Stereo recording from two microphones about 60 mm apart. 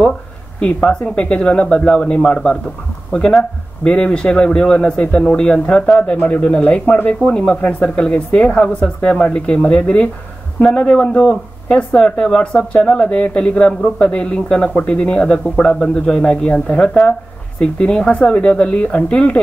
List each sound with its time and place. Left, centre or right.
0.6 s speech: centre